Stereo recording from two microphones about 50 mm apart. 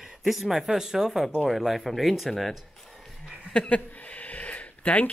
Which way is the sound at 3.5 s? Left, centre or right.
Left.